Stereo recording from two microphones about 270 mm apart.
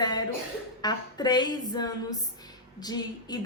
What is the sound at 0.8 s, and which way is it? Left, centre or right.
A woman's voice, centre.